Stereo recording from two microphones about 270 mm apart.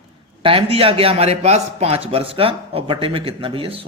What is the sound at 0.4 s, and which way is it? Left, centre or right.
A man's voice, right.